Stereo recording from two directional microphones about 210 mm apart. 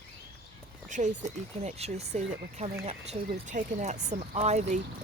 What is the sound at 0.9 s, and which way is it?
Speech, 35° right (ahead or behind).